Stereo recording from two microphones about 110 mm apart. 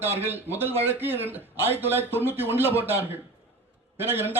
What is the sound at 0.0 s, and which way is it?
Speech, 20° right (ahead or behind).